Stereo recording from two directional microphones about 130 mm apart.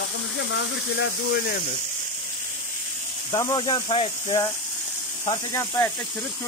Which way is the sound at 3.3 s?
30° left (ahead or behind).